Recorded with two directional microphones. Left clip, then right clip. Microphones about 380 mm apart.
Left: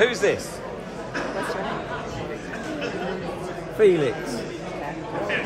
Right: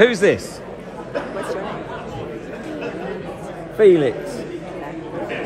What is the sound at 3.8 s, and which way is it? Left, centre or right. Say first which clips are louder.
Speech: right 5 dB; centre.